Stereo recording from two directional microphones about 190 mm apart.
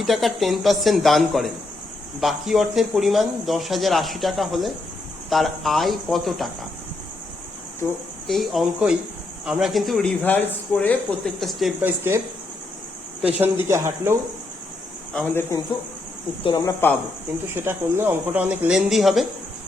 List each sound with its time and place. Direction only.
0.0 s speech: centre (ahead or behind)
8.3 s speech: centre (ahead or behind)
11.8 s speech: 10° right (ahead or behind)
13.2 s speech: 10° right (ahead or behind)
15.1 s speech: 5° left (ahead or behind)
16.4 s speech: 25° left (ahead or behind)
17.5 s speech: 15° right (ahead or behind)